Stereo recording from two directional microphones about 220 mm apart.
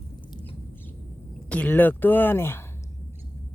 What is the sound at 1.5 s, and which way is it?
Speech, 5° left (ahead or behind).